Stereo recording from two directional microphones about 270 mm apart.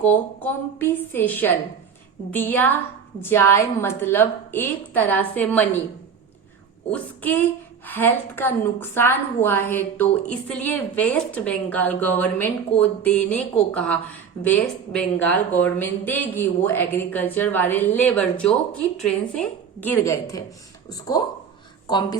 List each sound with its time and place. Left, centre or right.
0.1 s a woman's voice: centre
6.9 s a woman's voice: centre